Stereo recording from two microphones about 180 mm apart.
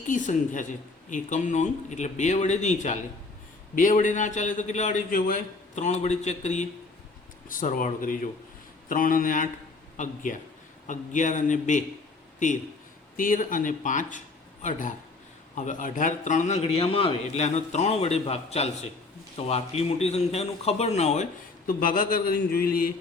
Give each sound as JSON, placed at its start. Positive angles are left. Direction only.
{"t": 0.1, "sound": "a man's voice", "side_deg": 45}
{"t": 10.8, "sound": "a man's voice", "side_deg": 45}
{"t": 13.1, "sound": "a man's voice", "side_deg": 50}
{"t": 21.7, "sound": "a man's voice", "side_deg": 50}